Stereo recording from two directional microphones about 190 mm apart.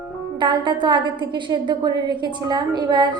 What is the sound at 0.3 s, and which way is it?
A woman's voice, 25° right (ahead or behind).